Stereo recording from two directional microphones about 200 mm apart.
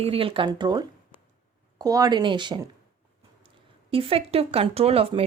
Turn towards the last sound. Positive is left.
turn(degrees=-30)  # may be behind; listen again after turning